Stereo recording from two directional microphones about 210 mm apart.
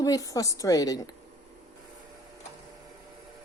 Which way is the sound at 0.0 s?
15° left (ahead or behind).